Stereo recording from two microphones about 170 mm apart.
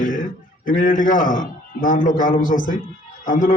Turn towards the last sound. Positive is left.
turn(degrees=50)  # may be behind; listen again after turning